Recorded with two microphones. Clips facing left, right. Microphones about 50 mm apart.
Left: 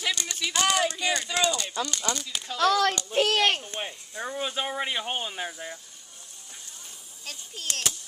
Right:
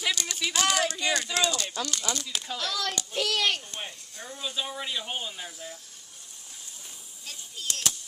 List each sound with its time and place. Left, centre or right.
0.0 s speech: centre
2.6 s a child's voice: left
3.1 s a child's voice: left
4.4 s speech: left
7.2 s speech: left